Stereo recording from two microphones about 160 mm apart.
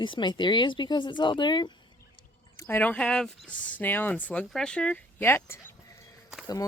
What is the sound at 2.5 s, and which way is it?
Speech, 15° left (ahead or behind).